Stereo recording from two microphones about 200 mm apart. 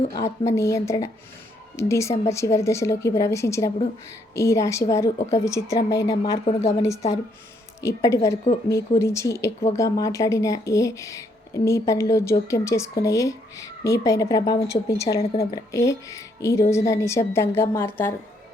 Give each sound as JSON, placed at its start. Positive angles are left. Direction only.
{"t": 0.1, "sound": "speech", "side_deg": 15}
{"t": 6.4, "sound": "speech", "side_deg": 30}
{"t": 7.8, "sound": "speech", "side_deg": 15}